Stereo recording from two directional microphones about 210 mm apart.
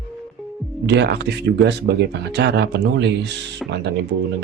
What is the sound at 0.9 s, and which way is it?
Speech, 55° right (ahead or behind).